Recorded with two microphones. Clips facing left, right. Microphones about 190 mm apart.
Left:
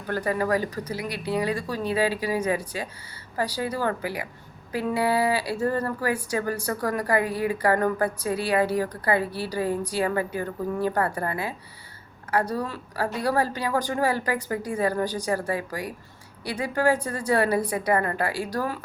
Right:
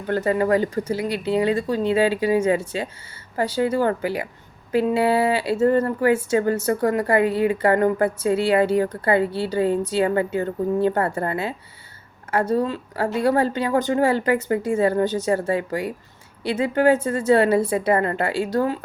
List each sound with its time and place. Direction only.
0.1 s speech: 25° right (ahead or behind)